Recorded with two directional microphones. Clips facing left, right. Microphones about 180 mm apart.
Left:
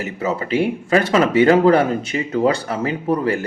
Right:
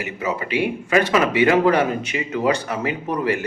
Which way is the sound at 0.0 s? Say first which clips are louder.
Left 3 dB; 35° left (ahead or behind).